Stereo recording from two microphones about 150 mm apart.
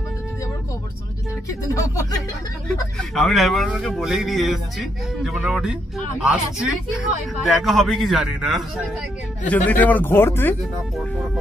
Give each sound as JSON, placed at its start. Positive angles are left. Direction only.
{"t": 1.5, "sound": "speech", "side_deg": 20}
{"t": 3.0, "sound": "speech", "side_deg": 0}
{"t": 7.4, "sound": "speech", "side_deg": 0}
{"t": 9.5, "sound": "speech", "side_deg": 10}